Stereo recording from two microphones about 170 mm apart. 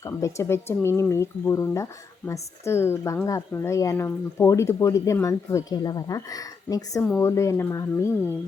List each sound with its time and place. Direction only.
0.0 s speech: 20° left (ahead or behind)